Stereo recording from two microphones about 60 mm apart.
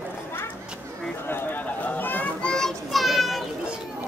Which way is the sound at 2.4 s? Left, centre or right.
Centre.